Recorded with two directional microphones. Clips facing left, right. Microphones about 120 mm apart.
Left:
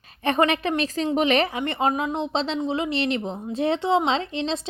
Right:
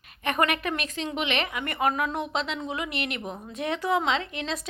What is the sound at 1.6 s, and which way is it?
A woman's voice, 25° left (ahead or behind).